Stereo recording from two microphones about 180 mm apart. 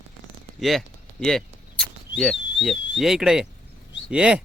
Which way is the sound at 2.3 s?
80° left.